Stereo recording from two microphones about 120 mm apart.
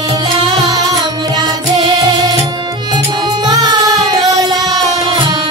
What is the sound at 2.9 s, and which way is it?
Music, 40° right (ahead or behind).